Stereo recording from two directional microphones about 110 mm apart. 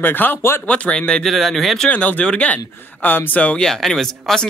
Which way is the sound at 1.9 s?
15° left (ahead or behind).